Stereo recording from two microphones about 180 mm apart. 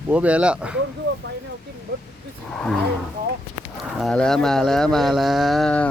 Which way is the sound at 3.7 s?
Centre (ahead or behind).